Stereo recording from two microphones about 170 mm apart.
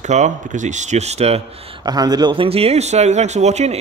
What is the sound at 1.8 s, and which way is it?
A man's voice, 25° right (ahead or behind).